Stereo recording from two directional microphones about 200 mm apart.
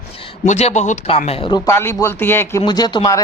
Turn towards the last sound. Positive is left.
turn(degrees=20)  # may be behind; listen again after turning